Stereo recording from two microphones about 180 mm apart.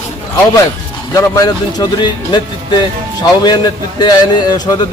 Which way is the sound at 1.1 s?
20° left (ahead or behind).